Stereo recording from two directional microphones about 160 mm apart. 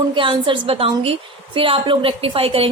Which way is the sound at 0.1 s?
30° right (ahead or behind).